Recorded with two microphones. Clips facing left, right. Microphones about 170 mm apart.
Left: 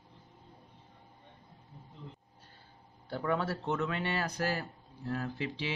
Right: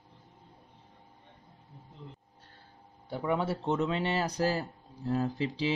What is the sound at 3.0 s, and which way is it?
Speech, 20° right (ahead or behind).